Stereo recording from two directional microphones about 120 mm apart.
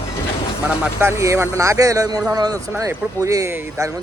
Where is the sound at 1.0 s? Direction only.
25° right (ahead or behind).